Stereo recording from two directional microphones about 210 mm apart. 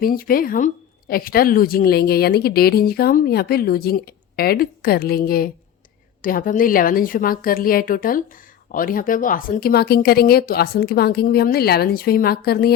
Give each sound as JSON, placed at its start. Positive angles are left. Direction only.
{"t": 0.0, "sound": "a woman's voice", "side_deg": 45}